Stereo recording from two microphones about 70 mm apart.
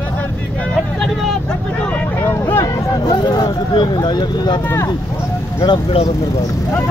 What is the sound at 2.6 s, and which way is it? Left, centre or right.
Vehicle, left.